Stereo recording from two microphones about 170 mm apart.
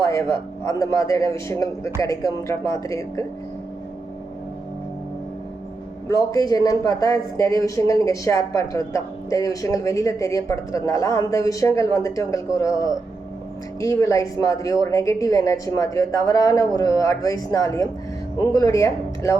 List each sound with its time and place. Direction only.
0.0 s speech: 20° left (ahead or behind)
6.1 s speech: 20° left (ahead or behind)